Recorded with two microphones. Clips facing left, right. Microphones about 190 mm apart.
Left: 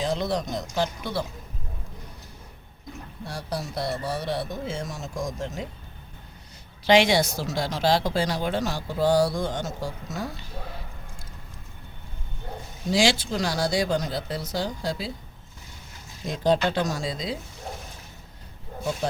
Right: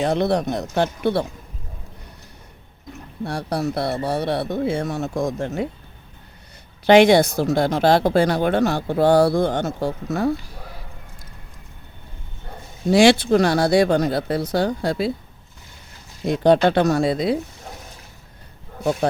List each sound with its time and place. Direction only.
0.0 s speech: 65° right (ahead or behind)
3.2 s speech: 65° right (ahead or behind)
6.8 s speech: 55° right (ahead or behind)
12.9 s speech: 60° right (ahead or behind)
16.2 s speech: 65° right (ahead or behind)